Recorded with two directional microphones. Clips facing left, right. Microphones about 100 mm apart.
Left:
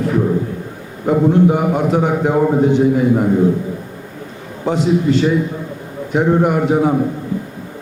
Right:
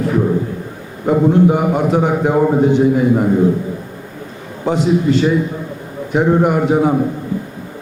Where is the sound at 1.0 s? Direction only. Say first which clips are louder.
Right 1 dB; 25° right (ahead or behind).